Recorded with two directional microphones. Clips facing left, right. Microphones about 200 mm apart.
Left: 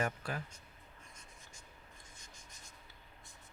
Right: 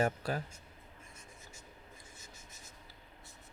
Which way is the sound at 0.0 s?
35° right (ahead or behind).